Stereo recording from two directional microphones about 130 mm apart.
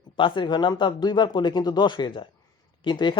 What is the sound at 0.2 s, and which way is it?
Speech, 40° left (ahead or behind).